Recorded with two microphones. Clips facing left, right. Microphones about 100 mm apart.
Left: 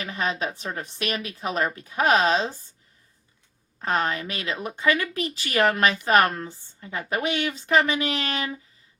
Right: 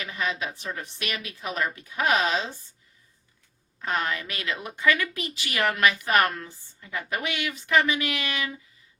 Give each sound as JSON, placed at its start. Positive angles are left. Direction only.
{"t": 0.0, "sound": "a woman's voice", "side_deg": 35}
{"t": 3.8, "sound": "a woman's voice", "side_deg": 35}
{"t": 5.1, "sound": "a woman's voice", "side_deg": 35}